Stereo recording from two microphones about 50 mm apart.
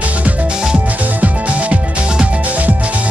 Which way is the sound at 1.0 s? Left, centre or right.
Right.